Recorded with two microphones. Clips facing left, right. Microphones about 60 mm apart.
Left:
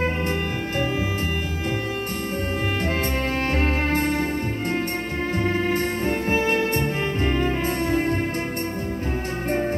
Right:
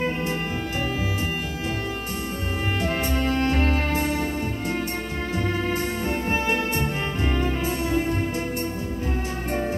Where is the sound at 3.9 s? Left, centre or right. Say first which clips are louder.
Left 2 dB; left.